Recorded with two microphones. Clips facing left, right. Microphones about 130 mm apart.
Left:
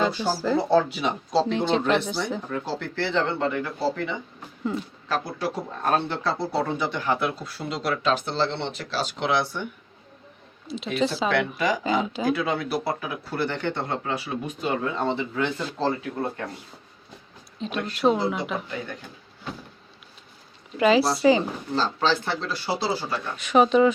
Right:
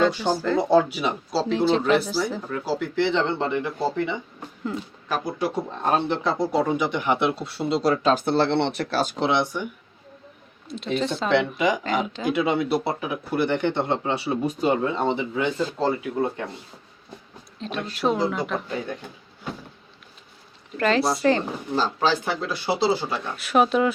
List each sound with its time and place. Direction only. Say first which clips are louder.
0.0 s speech: right 3 dB; 5° left (ahead or behind)
0.7 s speech: right 4 dB; 10° right (ahead or behind); by 9.1 s 55° right (ahead or behind)
9.3 s speech: right 2 dB; 15° right (ahead or behind)
10.9 s speech: left 1 dB; centre (ahead or behind)
11.3 s speech: right 3 dB; 20° right (ahead or behind)
14.9 s speech: right 2 dB; 15° right (ahead or behind)
17.6 s speech: left 2 dB; centre (ahead or behind)
20.7 s speech: left 2 dB; 5° left (ahead or behind)
21.8 s speech: right 1 dB; 10° right (ahead or behind)
23.4 s speech: left 2 dB; 5° right (ahead or behind)